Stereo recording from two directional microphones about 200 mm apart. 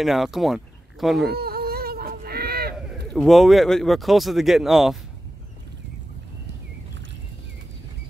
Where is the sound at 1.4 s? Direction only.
50° right (ahead or behind).